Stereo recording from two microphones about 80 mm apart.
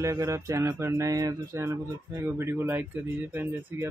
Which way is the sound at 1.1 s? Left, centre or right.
Right.